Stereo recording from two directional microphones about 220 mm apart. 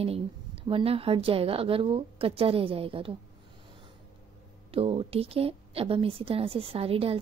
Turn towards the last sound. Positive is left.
turn(degrees=-25)  # may be behind; listen again after turning